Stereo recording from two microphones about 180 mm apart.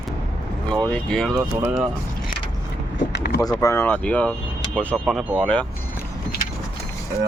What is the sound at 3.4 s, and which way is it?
Speech, 20° left (ahead or behind).